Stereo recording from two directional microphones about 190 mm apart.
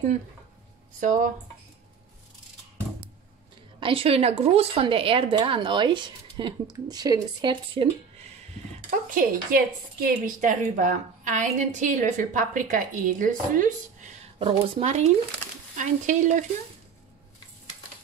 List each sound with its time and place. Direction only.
1.0 s a woman's voice: 40° right (ahead or behind)
3.8 s speech: 30° right (ahead or behind)
8.9 s a woman's voice: 45° right (ahead or behind)